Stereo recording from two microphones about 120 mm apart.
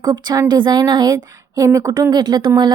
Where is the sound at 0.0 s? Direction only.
35° right (ahead or behind).